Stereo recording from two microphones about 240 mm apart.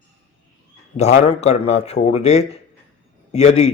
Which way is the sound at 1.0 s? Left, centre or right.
Left.